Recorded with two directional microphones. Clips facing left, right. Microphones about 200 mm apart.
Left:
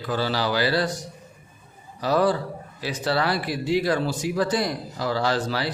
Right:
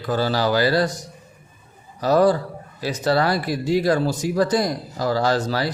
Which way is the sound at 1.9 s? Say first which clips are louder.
Right 4 dB; 45° right (ahead or behind).